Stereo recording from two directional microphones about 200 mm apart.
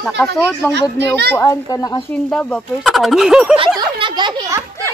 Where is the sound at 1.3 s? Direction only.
15° left (ahead or behind).